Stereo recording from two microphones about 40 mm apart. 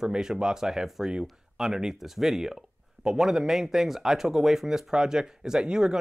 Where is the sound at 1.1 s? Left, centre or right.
Right.